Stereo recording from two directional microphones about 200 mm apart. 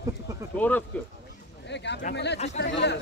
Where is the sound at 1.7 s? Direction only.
60° left (ahead or behind).